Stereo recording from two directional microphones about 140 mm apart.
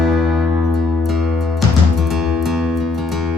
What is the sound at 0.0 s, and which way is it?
Music, centre (ahead or behind).